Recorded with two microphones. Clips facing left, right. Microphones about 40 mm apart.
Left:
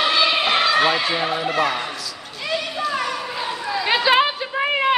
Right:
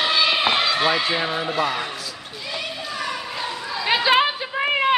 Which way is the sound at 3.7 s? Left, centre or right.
Centre.